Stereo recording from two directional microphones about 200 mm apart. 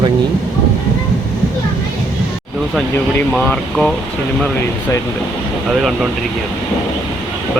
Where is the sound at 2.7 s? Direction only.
5° left (ahead or behind).